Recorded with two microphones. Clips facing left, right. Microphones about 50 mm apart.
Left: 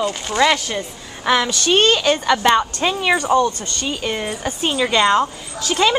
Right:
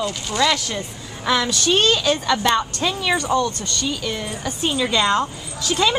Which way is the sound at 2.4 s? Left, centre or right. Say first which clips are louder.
Left 4 dB; left.